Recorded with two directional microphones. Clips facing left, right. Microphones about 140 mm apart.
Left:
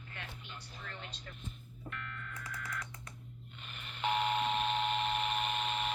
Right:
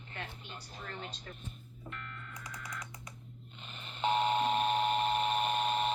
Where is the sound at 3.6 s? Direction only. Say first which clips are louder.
Right 3 dB; 30° right (ahead or behind).